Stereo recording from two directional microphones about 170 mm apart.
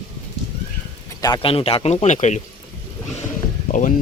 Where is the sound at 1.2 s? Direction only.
25° left (ahead or behind); by 2.3 s 45° left (ahead or behind).